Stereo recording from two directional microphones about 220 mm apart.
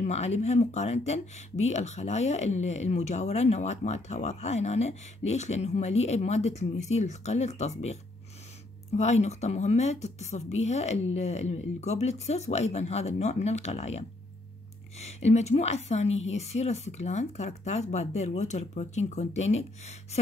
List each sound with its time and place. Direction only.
0.0 s a woman's voice: 30° left (ahead or behind)